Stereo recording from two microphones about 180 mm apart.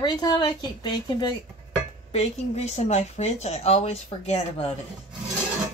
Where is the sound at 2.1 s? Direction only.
35° left (ahead or behind).